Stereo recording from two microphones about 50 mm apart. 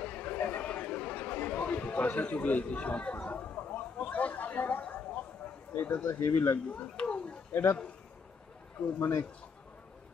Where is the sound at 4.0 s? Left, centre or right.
Left.